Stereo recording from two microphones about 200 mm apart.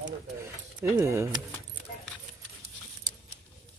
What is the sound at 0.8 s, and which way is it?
Speech, 15° right (ahead or behind).